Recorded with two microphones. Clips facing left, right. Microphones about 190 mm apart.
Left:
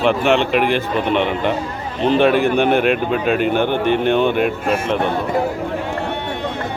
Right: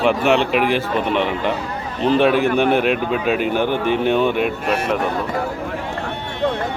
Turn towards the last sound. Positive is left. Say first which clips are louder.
# left 1 dB
turn(degrees=0)  # may be behind; listen again after turning